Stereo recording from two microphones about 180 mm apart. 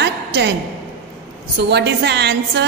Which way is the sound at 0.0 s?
70° right (ahead or behind).